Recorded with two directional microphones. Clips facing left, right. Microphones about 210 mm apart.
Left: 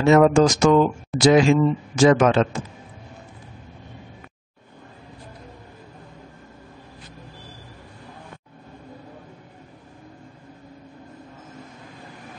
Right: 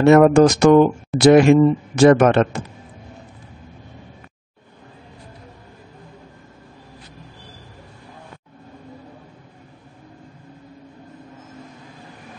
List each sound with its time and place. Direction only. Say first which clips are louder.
0.0 s speech: right 4 dB; 60° right (ahead or behind)